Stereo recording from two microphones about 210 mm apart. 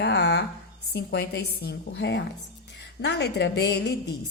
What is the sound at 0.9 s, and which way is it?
A woman's voice, 50° left (ahead or behind).